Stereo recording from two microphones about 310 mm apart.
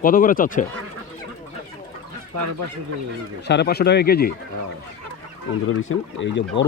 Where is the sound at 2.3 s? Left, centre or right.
Right.